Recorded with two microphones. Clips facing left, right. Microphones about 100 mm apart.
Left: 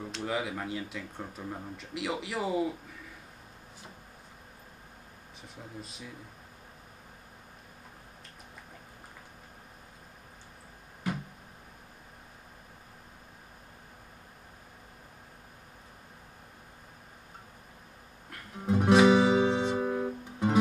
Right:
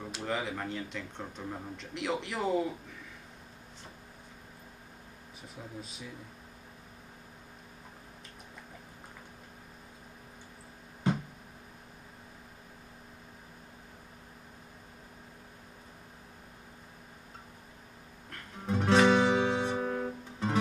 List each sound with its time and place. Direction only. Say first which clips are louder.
0.0 s speech: left 1 dB; centre (ahead or behind)
5.8 s speech: left 2 dB; centre (ahead or behind)
11.1 s a sound: right 4 dB; 25° right (ahead or behind)
18.3 s guitar: left 4 dB; 10° left (ahead or behind)